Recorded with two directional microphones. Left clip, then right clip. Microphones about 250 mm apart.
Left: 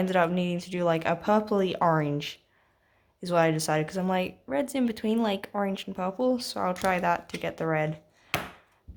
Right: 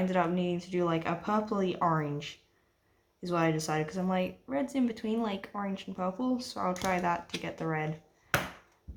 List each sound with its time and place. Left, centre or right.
0.0 s speech: left